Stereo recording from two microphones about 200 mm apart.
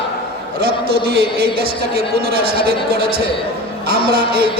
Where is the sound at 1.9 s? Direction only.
50° right (ahead or behind).